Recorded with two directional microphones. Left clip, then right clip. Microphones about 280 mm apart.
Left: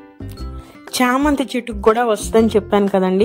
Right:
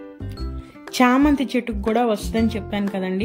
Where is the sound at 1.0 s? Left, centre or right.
Centre.